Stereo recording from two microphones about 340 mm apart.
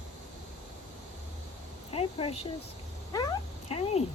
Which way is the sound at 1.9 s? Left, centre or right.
Centre.